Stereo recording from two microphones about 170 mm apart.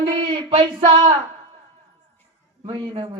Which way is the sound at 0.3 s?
30° right (ahead or behind).